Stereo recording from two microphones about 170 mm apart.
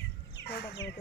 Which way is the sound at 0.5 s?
70° left (ahead or behind).